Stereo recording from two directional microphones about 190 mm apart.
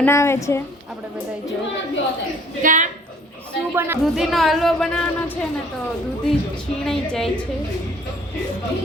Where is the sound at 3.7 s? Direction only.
10° right (ahead or behind).